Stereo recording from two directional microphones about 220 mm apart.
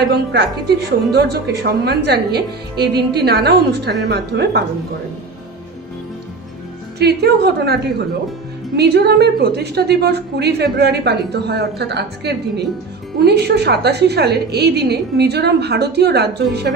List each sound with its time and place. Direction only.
0.1 s a woman's voice: 50° right (ahead or behind)
7.0 s a woman's voice: 45° right (ahead or behind)